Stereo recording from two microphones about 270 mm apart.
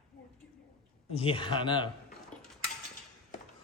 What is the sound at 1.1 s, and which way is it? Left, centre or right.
Speech, centre.